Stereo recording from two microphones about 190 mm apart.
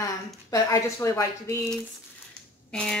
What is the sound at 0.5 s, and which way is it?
Speech, 15° left (ahead or behind).